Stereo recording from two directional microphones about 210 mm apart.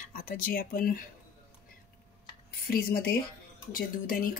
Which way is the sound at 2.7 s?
45° left (ahead or behind).